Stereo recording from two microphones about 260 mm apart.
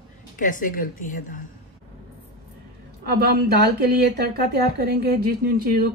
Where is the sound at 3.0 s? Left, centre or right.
Right.